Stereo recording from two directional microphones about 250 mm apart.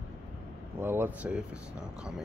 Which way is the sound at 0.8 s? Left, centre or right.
Centre.